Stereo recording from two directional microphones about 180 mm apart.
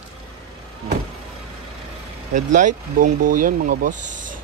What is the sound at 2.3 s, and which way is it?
Speech, 45° right (ahead or behind).